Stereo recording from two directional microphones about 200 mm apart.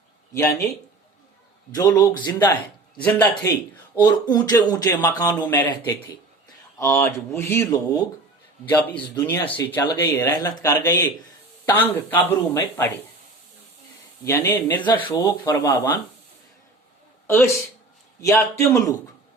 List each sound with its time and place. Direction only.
0.3 s speech: 15° left (ahead or behind)
4.0 s speech: 20° left (ahead or behind)
14.3 s speech: 15° left (ahead or behind)
14.8 s speech: 25° left (ahead or behind)
17.2 s a man's voice: 10° left (ahead or behind)